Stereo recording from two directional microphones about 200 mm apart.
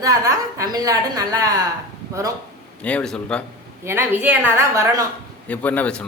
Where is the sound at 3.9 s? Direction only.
10° right (ahead or behind).